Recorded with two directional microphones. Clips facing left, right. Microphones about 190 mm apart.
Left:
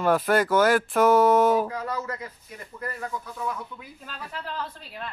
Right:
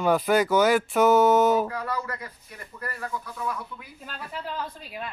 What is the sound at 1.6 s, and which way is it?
Speech, 20° left (ahead or behind).